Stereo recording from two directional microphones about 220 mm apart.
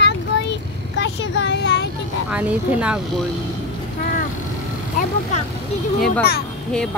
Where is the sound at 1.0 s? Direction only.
55° left (ahead or behind).